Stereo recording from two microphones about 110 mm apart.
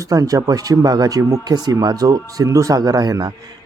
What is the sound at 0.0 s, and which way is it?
Speech, 35° right (ahead or behind).